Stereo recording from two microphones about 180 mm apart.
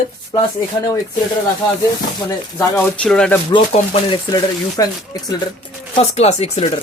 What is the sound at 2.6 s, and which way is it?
Speech, 10° left (ahead or behind).